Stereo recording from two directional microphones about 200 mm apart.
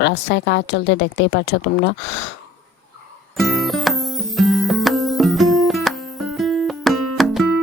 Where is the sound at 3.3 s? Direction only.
Centre (ahead or behind).